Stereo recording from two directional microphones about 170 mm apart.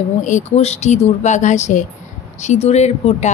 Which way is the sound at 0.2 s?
40° left (ahead or behind).